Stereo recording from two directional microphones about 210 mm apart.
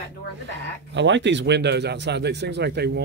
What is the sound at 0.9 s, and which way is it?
A man's voice, 60° right (ahead or behind).